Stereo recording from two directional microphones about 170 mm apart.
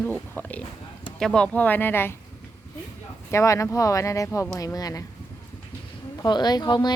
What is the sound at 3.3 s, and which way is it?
Speech, 20° left (ahead or behind).